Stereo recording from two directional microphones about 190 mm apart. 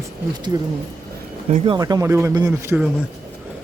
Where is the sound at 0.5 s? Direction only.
20° right (ahead or behind).